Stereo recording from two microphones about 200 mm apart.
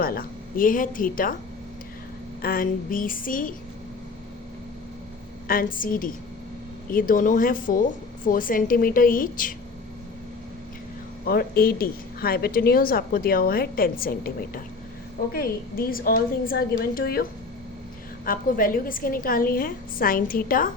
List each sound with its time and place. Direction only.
0.0 s a woman's voice: 45° left (ahead or behind)
2.4 s a woman's voice: 45° left (ahead or behind)
5.5 s a woman's voice: 45° left (ahead or behind)
11.3 s a woman's voice: 50° left (ahead or behind)
18.3 s a woman's voice: 45° left (ahead or behind)